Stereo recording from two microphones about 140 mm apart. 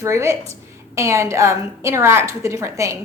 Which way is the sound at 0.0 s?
20° right (ahead or behind).